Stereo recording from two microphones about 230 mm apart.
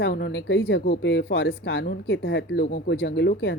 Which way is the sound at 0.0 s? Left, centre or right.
Left.